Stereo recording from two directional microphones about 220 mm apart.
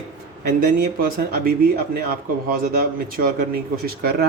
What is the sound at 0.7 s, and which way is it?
Speech, 40° right (ahead or behind).